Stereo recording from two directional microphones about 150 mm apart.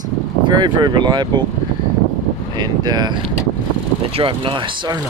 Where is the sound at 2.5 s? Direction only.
25° right (ahead or behind).